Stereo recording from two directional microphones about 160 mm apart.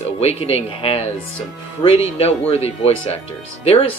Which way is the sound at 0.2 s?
40° left (ahead or behind).